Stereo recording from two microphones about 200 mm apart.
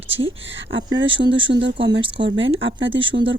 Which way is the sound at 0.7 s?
65° right (ahead or behind).